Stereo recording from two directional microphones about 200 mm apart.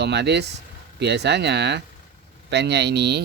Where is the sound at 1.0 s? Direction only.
60° right (ahead or behind).